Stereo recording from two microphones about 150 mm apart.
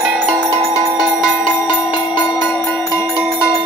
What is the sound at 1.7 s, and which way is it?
Jingle bell, 30° left (ahead or behind).